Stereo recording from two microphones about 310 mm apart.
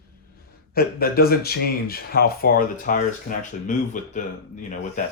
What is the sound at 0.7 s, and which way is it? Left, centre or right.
Speech, left.